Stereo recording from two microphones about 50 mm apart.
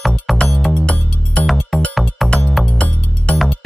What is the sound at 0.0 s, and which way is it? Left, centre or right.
Music, centre.